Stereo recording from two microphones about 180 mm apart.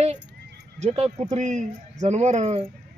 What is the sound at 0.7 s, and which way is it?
Speech, 35° right (ahead or behind).